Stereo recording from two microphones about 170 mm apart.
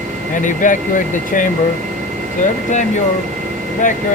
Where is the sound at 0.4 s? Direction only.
50° left (ahead or behind).